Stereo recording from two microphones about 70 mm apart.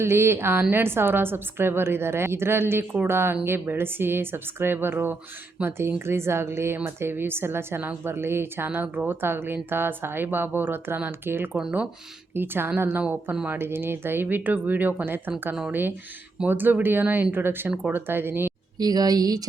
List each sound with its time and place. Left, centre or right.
0.0 s speech: right
16.5 s speech: right
18.8 s speech: right